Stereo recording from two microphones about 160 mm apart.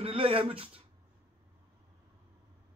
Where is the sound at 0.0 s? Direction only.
35° right (ahead or behind).